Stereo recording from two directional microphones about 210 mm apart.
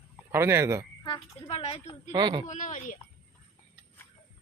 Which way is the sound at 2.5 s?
35° left (ahead or behind).